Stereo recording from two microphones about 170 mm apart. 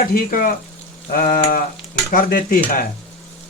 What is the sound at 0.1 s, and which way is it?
Speech, 60° left (ahead or behind).